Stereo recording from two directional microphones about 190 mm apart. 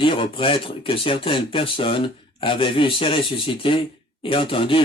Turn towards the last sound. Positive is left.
turn(degrees=30)  # may be behind; listen again after turning